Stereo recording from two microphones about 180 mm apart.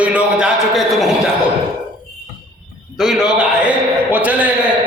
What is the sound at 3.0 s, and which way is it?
A man's voice, centre (ahead or behind).